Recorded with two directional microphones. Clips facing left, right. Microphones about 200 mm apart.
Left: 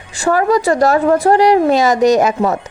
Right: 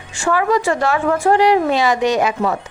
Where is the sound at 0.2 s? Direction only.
40° left (ahead or behind).